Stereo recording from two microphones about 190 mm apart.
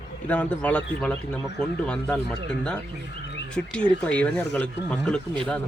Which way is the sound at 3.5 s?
5° left (ahead or behind).